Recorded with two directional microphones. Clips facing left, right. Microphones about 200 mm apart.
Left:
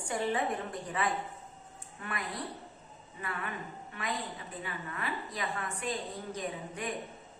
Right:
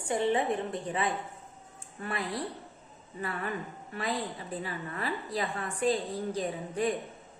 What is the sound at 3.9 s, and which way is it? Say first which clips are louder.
A woman's voice: right 5 dB; 35° right (ahead or behind).